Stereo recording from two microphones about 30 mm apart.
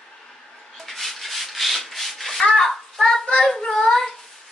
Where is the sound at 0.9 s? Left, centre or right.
Centre.